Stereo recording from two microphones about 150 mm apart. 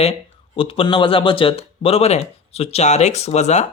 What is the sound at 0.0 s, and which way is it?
Speech, 40° left (ahead or behind).